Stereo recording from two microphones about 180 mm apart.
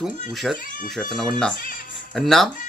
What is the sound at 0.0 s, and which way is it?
Speech, centre (ahead or behind).